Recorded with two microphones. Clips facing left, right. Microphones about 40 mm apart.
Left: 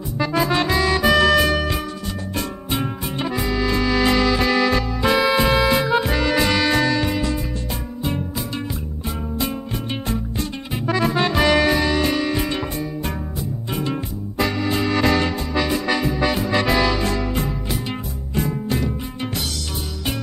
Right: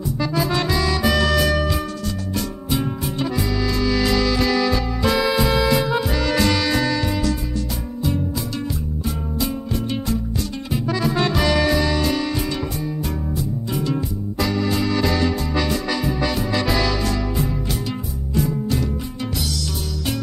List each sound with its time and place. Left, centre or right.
0.2 s music: left
5.0 s music: left
6.3 s music: left
6.7 s music: left
7.1 s music: left
10.9 s music: left
11.1 s music: left
13.9 s music: left
15.5 s music: centre
15.9 s music: left
18.3 s music: left